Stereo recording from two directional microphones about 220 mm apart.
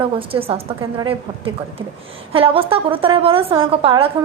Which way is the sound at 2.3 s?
25° right (ahead or behind).